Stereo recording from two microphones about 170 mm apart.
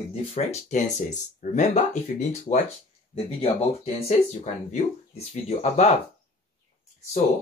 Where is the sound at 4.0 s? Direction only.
40° left (ahead or behind).